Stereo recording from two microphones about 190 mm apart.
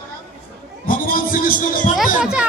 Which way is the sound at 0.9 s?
45° left (ahead or behind).